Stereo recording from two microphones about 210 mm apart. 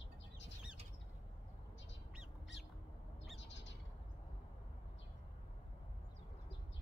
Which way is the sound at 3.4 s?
60° left (ahead or behind).